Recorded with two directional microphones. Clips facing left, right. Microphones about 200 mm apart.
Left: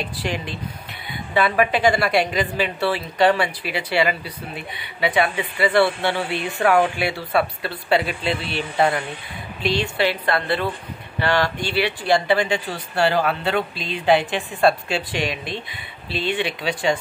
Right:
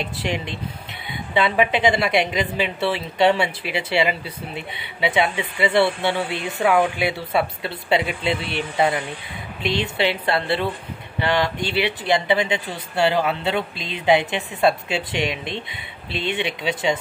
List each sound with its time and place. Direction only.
0.0 s a woman's voice: 20° right (ahead or behind)